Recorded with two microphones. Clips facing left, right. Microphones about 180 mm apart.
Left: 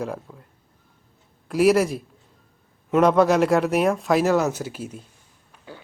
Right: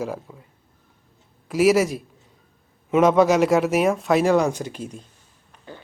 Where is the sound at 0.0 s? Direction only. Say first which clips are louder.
Right 1 dB; centre (ahead or behind).